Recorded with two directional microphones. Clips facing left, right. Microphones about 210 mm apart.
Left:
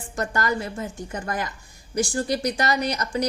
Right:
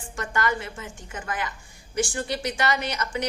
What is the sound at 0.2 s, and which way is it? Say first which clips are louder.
A woman's voice: left 2 dB; 40° left (ahead or behind).